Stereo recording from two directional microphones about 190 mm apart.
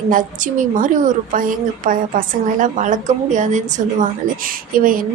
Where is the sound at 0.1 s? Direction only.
45° right (ahead or behind).